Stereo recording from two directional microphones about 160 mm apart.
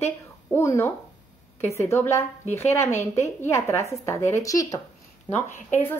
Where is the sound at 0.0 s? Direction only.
15° left (ahead or behind).